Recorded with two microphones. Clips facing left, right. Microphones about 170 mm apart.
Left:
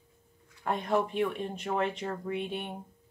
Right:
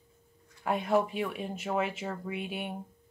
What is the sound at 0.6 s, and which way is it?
Speech, 5° right (ahead or behind).